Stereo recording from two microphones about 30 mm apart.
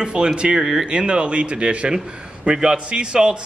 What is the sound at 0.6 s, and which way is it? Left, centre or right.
Speech, centre.